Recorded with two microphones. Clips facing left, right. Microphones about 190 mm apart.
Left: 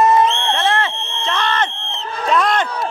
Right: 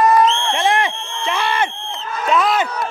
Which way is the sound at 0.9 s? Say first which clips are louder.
Left 1 dB; 20° left (ahead or behind).